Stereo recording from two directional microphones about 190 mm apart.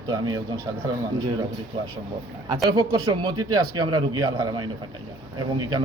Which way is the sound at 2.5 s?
20° right (ahead or behind).